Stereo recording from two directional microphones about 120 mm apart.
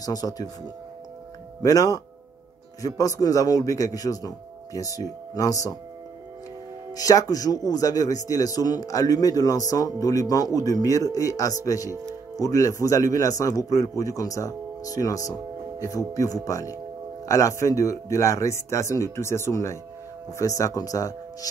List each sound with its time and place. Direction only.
0.0 s speech: 30° left (ahead or behind)
1.6 s a man's voice: 30° left (ahead or behind)
6.9 s a man's voice: 30° left (ahead or behind)